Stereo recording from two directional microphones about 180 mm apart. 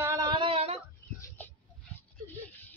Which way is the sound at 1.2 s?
10° left (ahead or behind).